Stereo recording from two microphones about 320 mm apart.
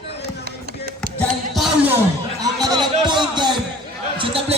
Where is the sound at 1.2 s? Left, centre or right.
Centre.